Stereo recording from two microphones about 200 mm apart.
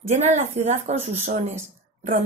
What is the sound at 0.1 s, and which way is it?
Speech, 35° right (ahead or behind).